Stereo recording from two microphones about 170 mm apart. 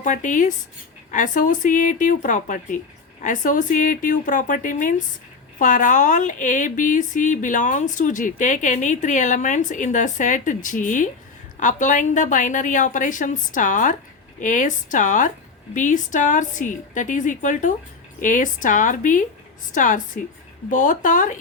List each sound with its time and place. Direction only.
0.0 s speech: 50° left (ahead or behind)